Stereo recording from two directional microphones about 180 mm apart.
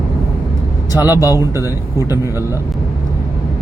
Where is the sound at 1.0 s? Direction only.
20° left (ahead or behind).